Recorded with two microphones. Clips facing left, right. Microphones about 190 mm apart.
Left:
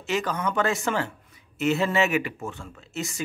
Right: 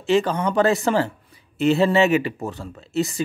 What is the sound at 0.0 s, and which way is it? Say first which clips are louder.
Speech: right 7 dB; 30° right (ahead or behind).